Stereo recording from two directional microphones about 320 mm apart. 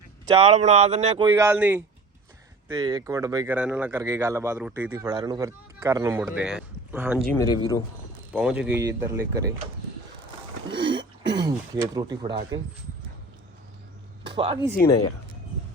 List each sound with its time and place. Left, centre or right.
0.4 s speech: right
1.3 s speech: centre
7.5 s speech: centre
8.3 s speech: centre
10.7 s a sound: centre
14.3 s speech: centre
14.6 s speech: centre